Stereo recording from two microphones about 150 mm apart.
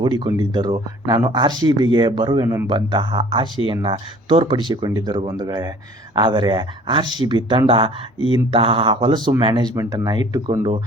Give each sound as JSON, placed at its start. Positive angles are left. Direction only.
{"t": 0.2, "sound": "speech", "side_deg": -30}